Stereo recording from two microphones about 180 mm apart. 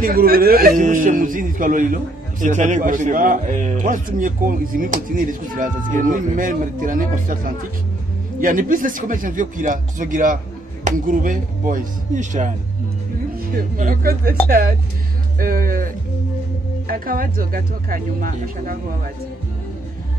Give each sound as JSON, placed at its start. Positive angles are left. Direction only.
{"t": 0.0, "sound": "a man's voice", "side_deg": -55}
{"t": 15.3, "sound": "a man's voice", "side_deg": -50}